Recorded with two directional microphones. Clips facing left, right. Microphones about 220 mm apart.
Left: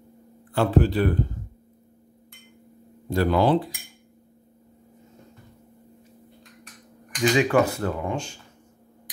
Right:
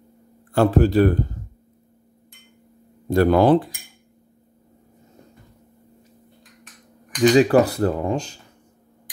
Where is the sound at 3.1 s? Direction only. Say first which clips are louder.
Right 5 dB; 50° right (ahead or behind).